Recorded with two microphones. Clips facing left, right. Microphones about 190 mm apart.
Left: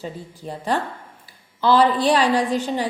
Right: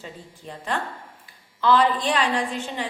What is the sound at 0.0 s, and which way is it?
A woman's voice, 35° left (ahead or behind).